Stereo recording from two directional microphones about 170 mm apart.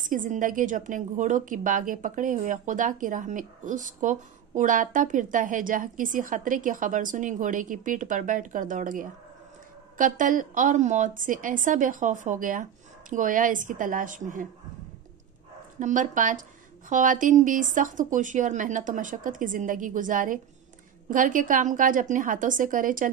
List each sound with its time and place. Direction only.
0.0 s a woman's voice: 50° right (ahead or behind)
15.8 s a woman's voice: 50° right (ahead or behind)